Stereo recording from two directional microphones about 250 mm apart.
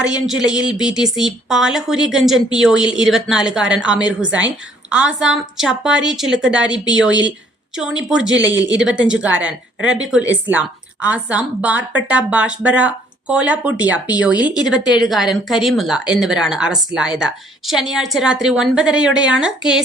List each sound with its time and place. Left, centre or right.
0.0 s a woman's voice: centre
7.1 s speech: right
7.8 s a woman's voice: centre
8.3 s speech: right
8.8 s a woman's voice: centre